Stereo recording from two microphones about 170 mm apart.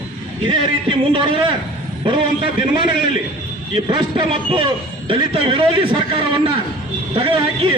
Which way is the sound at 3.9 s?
25° right (ahead or behind).